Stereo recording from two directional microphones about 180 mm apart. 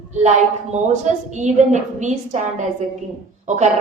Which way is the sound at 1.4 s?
40° right (ahead or behind).